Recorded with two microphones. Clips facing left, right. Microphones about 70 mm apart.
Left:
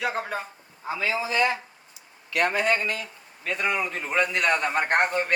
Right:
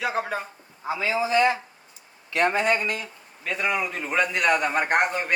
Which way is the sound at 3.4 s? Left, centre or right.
Centre.